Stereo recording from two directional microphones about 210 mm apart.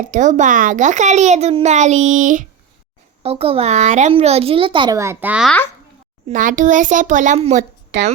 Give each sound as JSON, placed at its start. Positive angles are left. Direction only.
{"t": 0.0, "sound": "a child's voice", "side_deg": -35}
{"t": 3.2, "sound": "a child's voice", "side_deg": -30}
{"t": 6.2, "sound": "a child's voice", "side_deg": -40}